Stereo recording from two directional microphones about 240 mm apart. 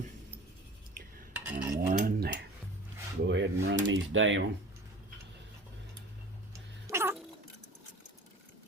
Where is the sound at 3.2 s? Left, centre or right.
Right.